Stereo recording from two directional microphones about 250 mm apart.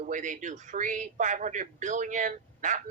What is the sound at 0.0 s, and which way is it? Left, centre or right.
A man's voice, right.